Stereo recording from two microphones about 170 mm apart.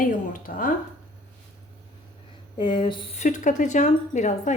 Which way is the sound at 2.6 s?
30° left (ahead or behind).